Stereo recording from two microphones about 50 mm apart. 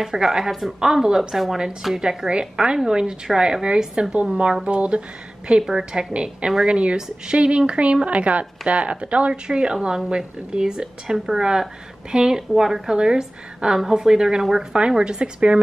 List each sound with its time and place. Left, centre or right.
0.0 s a woman's voice: centre
0.7 s a woman's voice: centre